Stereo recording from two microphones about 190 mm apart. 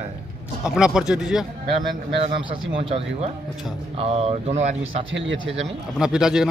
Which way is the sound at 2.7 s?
30° right (ahead or behind).